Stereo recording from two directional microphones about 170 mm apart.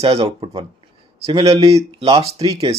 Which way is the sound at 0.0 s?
35° right (ahead or behind).